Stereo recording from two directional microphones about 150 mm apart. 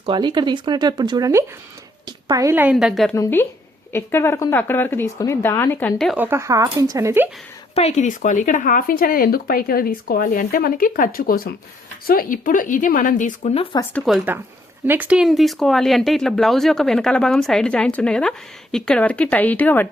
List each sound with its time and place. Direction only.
0.0 s a woman's voice: 30° right (ahead or behind); by 2.7 s 15° right (ahead or behind)
2.7 s speech: centre (ahead or behind)
3.2 s speech: 15° left (ahead or behind)
6.1 s speech: 15° right (ahead or behind)
7.8 s a woman's voice: 45° left (ahead or behind)
13.9 s speech: centre (ahead or behind)
14.8 s speech: 10° right (ahead or behind); by 19.9 s 10° left (ahead or behind)